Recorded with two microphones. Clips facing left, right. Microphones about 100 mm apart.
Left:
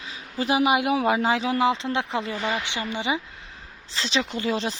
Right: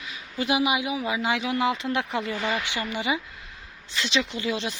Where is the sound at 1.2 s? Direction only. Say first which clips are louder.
Left 3 dB; 30° left (ahead or behind).